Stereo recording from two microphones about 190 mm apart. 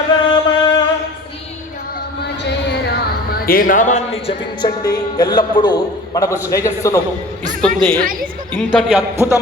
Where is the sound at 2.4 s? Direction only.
55° left (ahead or behind); by 4.3 s 40° left (ahead or behind).